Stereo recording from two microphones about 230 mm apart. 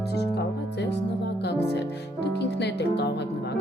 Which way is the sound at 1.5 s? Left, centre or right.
Left.